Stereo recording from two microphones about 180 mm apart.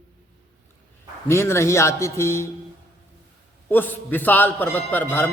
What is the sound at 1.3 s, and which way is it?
A man's voice, 15° left (ahead or behind).